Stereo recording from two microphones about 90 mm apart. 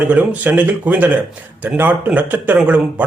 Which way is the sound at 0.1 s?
20° right (ahead or behind).